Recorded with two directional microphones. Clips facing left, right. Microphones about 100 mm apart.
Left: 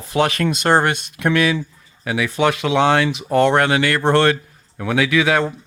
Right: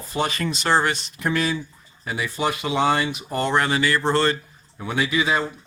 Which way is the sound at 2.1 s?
85° left.